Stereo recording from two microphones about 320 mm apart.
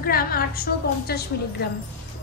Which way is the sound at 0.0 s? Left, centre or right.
Left.